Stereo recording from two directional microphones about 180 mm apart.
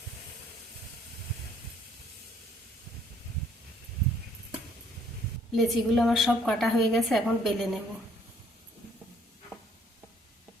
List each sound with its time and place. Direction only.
5.5 s a woman's voice: centre (ahead or behind)